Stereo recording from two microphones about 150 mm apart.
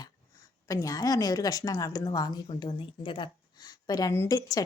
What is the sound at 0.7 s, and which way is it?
A woman's voice, 20° left (ahead or behind).